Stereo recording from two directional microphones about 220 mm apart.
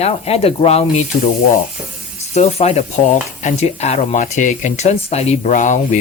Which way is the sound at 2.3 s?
30° left (ahead or behind).